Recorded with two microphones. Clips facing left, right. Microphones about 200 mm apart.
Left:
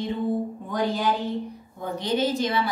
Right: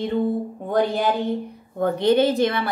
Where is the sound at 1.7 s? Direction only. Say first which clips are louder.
Right 9 dB; 60° right (ahead or behind).